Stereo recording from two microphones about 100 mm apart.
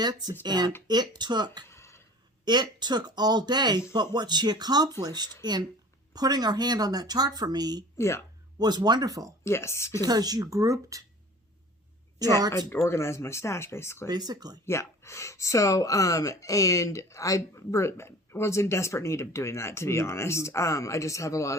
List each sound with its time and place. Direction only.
0.0 s speech: 45° right (ahead or behind)
1.6 s a sound: 25° left (ahead or behind)
2.4 s speech: 45° right (ahead or behind)
7.9 s speech: 30° left (ahead or behind)
8.5 s speech: 45° right (ahead or behind)
9.4 s speech: 25° left (ahead or behind)
10.0 s speech: 40° right (ahead or behind)
12.2 s speech: 40° right (ahead or behind)
12.5 s speech: 25° left (ahead or behind)
14.1 s speech: 45° right (ahead or behind)
14.6 s speech: 25° left (ahead or behind)